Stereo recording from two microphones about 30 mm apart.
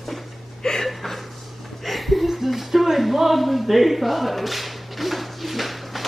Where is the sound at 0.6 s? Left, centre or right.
Centre.